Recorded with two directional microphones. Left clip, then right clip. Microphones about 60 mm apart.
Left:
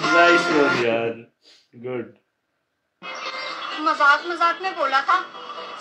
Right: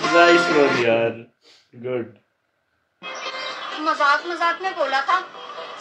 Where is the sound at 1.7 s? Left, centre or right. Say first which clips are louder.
Right 2 dB; centre.